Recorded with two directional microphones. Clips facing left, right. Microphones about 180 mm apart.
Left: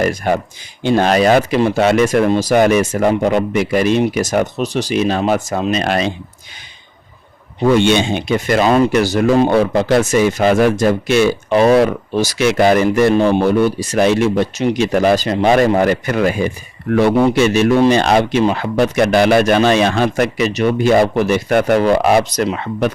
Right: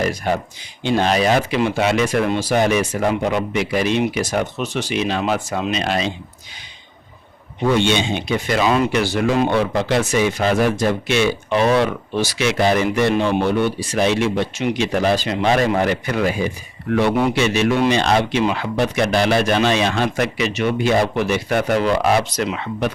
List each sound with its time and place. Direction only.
0.0 s speech: 50° left (ahead or behind)
7.8 s speech: 50° left (ahead or behind)